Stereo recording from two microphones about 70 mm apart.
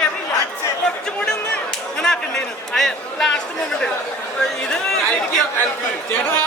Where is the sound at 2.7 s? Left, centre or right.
Centre.